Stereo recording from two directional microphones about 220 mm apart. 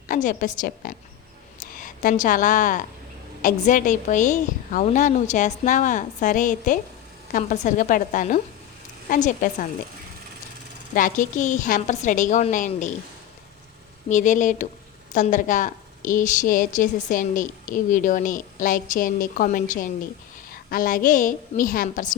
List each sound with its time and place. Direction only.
0.1 s a woman's voice: 35° left (ahead or behind)
10.9 s a woman's voice: 35° left (ahead or behind)
14.1 s a woman's voice: 35° left (ahead or behind)